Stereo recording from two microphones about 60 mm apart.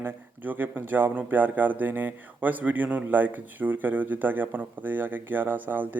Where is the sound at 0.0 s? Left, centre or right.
Right.